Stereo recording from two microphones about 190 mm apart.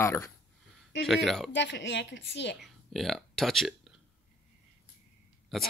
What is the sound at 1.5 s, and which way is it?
A woman's voice, 65° left (ahead or behind).